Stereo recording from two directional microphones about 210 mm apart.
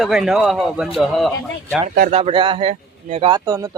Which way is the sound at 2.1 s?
30° right (ahead or behind).